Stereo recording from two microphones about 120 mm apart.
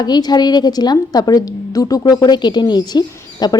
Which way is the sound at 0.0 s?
35° left (ahead or behind).